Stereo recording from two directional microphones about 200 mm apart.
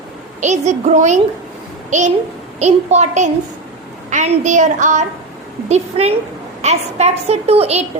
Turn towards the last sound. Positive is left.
turn(degrees=-30)  # may be behind; listen again after turning